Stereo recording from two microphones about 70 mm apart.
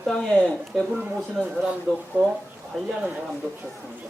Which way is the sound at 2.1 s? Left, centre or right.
Right.